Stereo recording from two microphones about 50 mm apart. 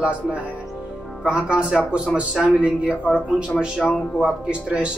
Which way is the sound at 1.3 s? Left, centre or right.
Right.